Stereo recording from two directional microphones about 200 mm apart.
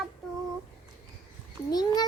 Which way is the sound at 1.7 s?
20° left (ahead or behind).